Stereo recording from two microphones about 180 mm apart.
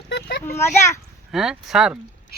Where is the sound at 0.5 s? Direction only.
15° left (ahead or behind).